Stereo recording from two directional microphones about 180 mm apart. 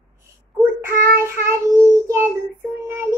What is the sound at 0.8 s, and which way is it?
Child singing, 15° right (ahead or behind).